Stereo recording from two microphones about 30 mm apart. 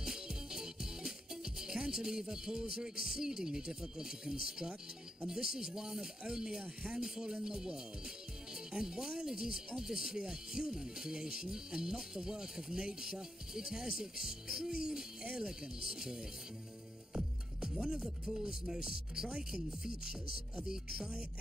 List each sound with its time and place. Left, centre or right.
0.0 s music: centre
2.7 s speech: centre
18.0 s speech: right